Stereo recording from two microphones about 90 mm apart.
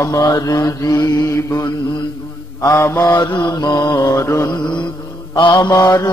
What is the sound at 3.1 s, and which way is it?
Mantra, 50° left (ahead or behind).